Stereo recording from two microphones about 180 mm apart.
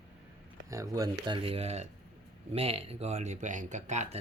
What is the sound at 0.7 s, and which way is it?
Speech, 20° right (ahead or behind).